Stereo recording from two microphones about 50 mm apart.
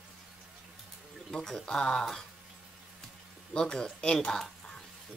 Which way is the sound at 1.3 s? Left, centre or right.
Centre.